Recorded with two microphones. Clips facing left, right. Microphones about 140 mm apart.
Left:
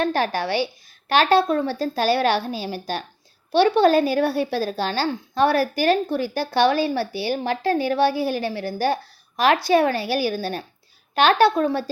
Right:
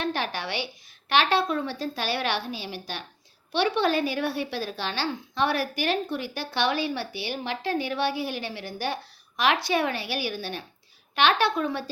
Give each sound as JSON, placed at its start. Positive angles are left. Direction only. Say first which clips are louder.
{"t": 0.0, "sound": "a woman's voice", "louder": "left 7 dB", "side_deg": 40}